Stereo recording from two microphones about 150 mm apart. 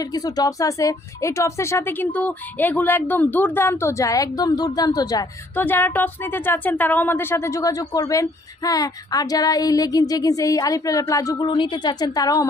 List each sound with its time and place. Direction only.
0.0 s speech: 25° left (ahead or behind)
5.5 s speech: 15° left (ahead or behind)